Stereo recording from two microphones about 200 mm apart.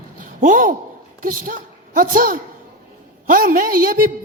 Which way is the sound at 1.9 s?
45° right (ahead or behind).